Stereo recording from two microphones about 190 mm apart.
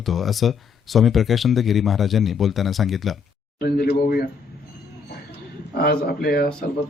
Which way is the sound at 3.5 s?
55° left (ahead or behind).